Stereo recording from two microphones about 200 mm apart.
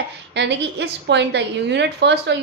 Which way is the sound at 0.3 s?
60° right (ahead or behind).